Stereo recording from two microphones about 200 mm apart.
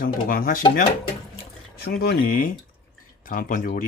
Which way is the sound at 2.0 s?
45° left (ahead or behind).